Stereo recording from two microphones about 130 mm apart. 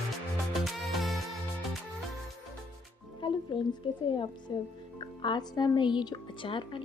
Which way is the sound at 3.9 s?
40° left (ahead or behind).